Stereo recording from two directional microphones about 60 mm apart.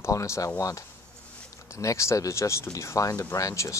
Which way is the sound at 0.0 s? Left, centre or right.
Left.